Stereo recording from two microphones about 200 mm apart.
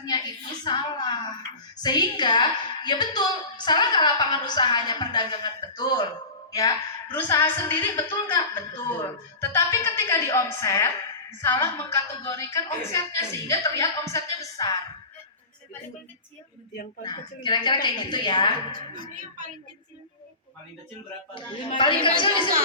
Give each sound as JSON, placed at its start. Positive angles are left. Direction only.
{"t": 0.0, "sound": "a woman's voice", "side_deg": 20}
{"t": 17.0, "sound": "a woman's voice", "side_deg": 20}
{"t": 18.7, "sound": "speech", "side_deg": -45}
{"t": 21.8, "sound": "a woman's voice", "side_deg": 25}